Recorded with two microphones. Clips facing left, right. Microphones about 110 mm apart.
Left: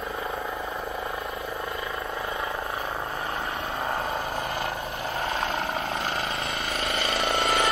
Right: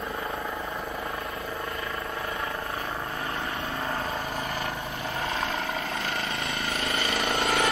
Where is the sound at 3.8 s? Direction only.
20° left (ahead or behind).